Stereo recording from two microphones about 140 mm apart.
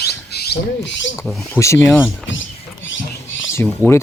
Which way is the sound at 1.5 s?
20° left (ahead or behind).